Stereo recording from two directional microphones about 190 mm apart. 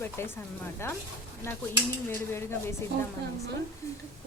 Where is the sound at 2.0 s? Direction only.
10° left (ahead or behind).